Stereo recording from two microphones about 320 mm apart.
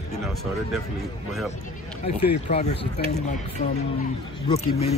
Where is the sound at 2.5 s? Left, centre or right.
Centre.